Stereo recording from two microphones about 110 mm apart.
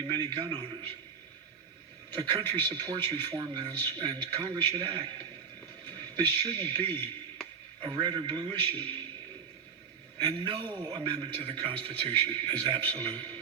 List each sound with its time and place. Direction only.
0.1 s a man's voice: 40° right (ahead or behind)
2.1 s a man's voice: 40° right (ahead or behind)
7.8 s a man's voice: 40° right (ahead or behind)
10.2 s a man's voice: 50° right (ahead or behind)